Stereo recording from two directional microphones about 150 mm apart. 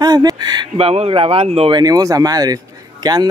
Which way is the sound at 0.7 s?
45° right (ahead or behind).